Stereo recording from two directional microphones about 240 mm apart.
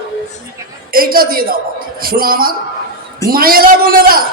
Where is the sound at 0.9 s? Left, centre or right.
Right.